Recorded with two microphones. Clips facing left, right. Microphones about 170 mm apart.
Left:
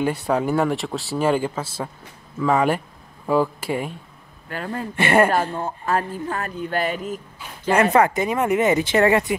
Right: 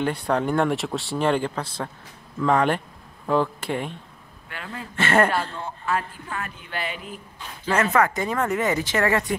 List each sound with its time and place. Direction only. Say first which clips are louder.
0.0 s speech: left 2 dB; 5° left (ahead or behind)
4.5 s speech: left 8 dB; 45° left (ahead or behind)
4.9 s speech: left 3 dB; 15° left (ahead or behind)
5.3 s speech: left 5 dB; 45° left (ahead or behind)
7.3 s a sound: left 4 dB; 15° left (ahead or behind)
7.9 s speech: left 4 dB; 25° left (ahead or behind)
8.2 s speech: left 4 dB; 15° left (ahead or behind)